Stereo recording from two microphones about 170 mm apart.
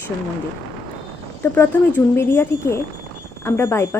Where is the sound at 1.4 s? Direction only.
15° left (ahead or behind).